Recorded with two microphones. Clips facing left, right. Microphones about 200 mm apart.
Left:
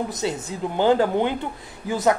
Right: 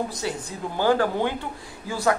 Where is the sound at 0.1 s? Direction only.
20° left (ahead or behind).